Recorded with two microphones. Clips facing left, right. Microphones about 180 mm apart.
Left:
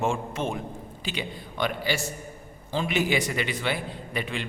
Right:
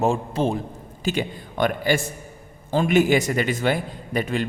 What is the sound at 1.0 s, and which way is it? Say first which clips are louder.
A man's voice: right 9 dB; 45° right (ahead or behind).